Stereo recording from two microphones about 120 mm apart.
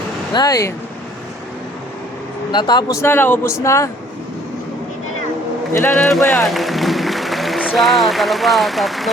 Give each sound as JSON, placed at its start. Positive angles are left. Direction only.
{"t": 0.3, "sound": "speech", "side_deg": 30}
{"t": 2.5, "sound": "speech", "side_deg": 35}
{"t": 3.0, "sound": "speech", "side_deg": 20}
{"t": 5.7, "sound": "a man's voice", "side_deg": 15}
{"t": 6.0, "sound": "speech", "side_deg": 5}